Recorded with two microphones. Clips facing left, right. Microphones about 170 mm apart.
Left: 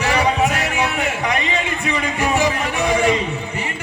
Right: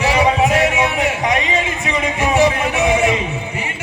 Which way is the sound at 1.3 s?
Centre (ahead or behind).